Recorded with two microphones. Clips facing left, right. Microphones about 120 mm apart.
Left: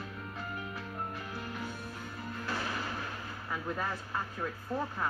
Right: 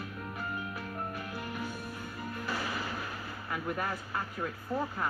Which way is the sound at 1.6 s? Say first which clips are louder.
Right 2 dB; 15° right (ahead or behind).